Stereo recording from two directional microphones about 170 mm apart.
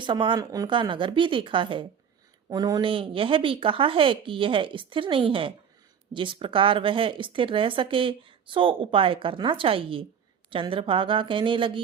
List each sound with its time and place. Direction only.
0.0 s speech: 30° right (ahead or behind)